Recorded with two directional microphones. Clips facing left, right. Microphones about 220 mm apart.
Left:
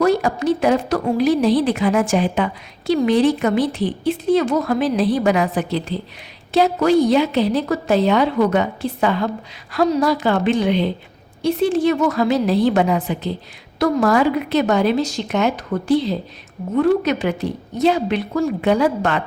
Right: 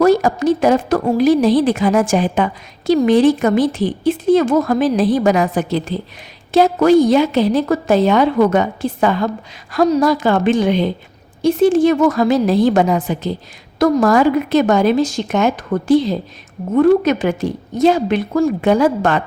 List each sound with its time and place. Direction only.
0.2 s a woman's voice: 45° right (ahead or behind)